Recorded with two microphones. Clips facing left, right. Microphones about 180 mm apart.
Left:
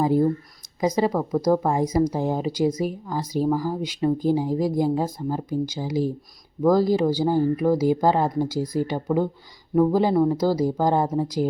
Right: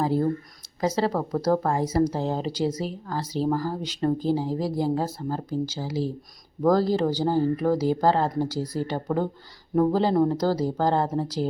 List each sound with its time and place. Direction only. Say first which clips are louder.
0.0 s speech: left 4 dB; 15° left (ahead or behind)